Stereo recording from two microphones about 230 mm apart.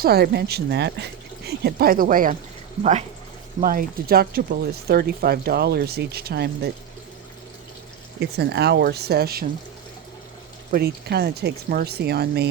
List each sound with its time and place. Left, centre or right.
0.0 s speech: right
3.6 s speech: right
8.2 s speech: right
10.7 s speech: right